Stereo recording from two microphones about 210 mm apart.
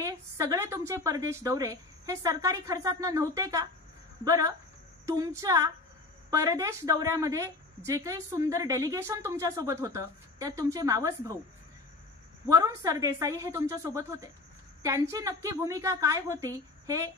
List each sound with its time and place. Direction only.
0.0 s a woman's voice: 15° right (ahead or behind)
12.4 s a woman's voice: 15° right (ahead or behind)